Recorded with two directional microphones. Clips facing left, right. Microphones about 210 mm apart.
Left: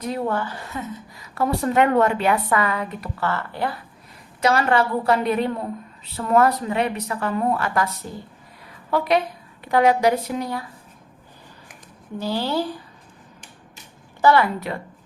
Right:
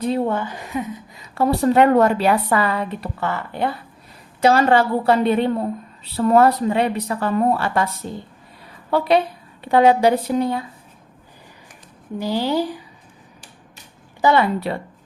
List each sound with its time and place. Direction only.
0.0 s a woman's voice: 25° right (ahead or behind)
1.4 s speech: 30° right (ahead or behind)
3.2 s a woman's voice: 20° right (ahead or behind)
8.9 s a woman's voice: 30° right (ahead or behind)
12.1 s a woman's voice: 15° right (ahead or behind)
14.2 s a woman's voice: 20° right (ahead or behind)